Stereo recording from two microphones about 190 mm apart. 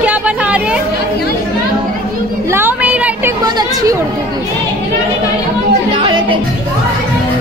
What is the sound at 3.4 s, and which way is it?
Speech, 20° right (ahead or behind).